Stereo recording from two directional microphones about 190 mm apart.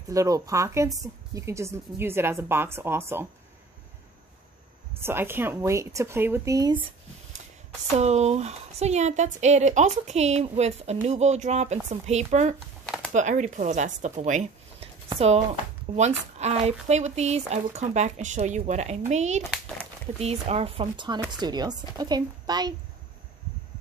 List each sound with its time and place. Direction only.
0.1 s a woman's voice: 15° right (ahead or behind)
5.0 s a woman's voice: 10° right (ahead or behind)
8.0 s speech: 35° right (ahead or behind)
12.8 s a sound: 5° left (ahead or behind)
13.1 s speech: 40° right (ahead or behind); by 22.8 s 20° right (ahead or behind)